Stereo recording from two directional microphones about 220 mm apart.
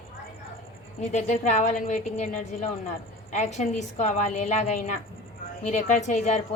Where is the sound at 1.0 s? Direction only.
30° left (ahead or behind).